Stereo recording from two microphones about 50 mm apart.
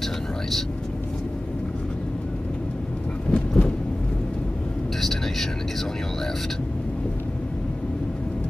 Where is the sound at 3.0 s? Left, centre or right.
Left.